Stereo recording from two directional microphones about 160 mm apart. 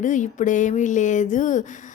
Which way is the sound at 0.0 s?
50° left (ahead or behind).